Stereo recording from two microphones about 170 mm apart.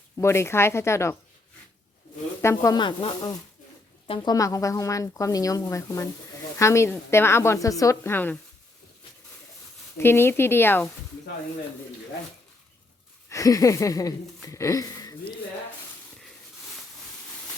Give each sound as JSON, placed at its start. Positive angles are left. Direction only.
{"t": 0.2, "sound": "a woman's voice", "side_deg": 15}
{"t": 2.4, "sound": "a woman's voice", "side_deg": 15}
{"t": 10.0, "sound": "a woman's voice", "side_deg": 15}
{"t": 13.3, "sound": "speech", "side_deg": 20}